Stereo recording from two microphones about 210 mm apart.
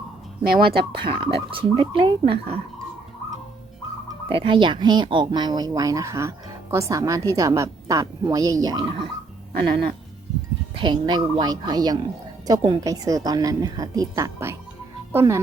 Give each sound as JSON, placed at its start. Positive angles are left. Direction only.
{"t": 0.4, "sound": "speech", "side_deg": -45}
{"t": 0.9, "sound": "speech", "side_deg": -25}
{"t": 4.3, "sound": "speech", "side_deg": -25}
{"t": 10.8, "sound": "speech", "side_deg": -20}